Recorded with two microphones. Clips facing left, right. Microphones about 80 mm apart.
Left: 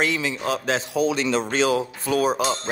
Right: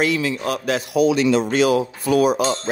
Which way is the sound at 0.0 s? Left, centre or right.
Left.